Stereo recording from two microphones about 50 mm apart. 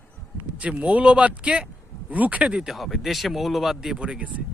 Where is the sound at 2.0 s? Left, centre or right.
Right.